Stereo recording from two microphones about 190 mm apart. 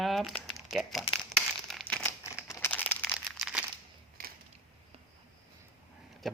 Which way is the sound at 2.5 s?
10° left (ahead or behind).